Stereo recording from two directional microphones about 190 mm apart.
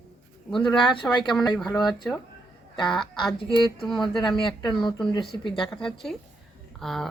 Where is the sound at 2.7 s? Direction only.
25° left (ahead or behind).